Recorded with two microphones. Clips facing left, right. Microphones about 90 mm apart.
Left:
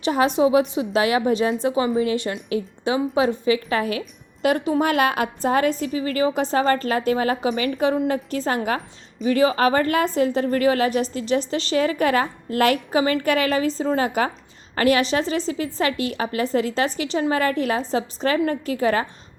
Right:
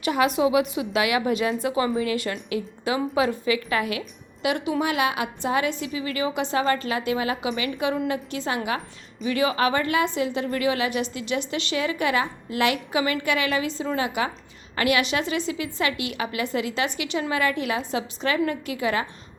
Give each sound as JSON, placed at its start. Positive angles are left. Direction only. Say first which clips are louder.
{"t": 0.0, "sound": "a woman's voice", "louder": "left 3 dB", "side_deg": 30}